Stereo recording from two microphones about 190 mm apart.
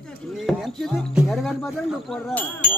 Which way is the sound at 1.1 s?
Centre (ahead or behind).